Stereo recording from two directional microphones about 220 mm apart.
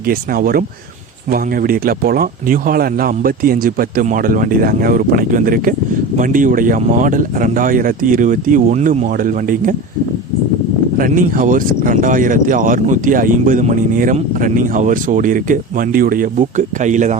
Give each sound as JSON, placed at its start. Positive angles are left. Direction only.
{"t": 0.1, "sound": "speech", "side_deg": -40}
{"t": 10.9, "sound": "speech", "side_deg": -40}